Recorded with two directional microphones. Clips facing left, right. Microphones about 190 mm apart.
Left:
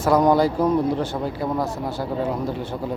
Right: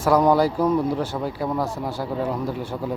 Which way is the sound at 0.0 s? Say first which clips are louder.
Even; 10° right (ahead or behind).